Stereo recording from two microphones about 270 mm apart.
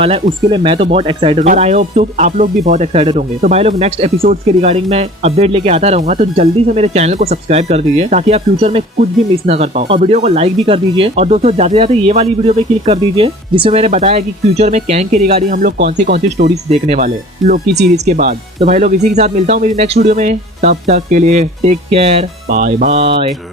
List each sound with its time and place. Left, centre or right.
0.0 s speech: right